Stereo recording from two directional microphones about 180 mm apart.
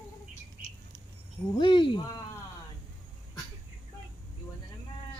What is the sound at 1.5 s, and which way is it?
Speech, 25° left (ahead or behind).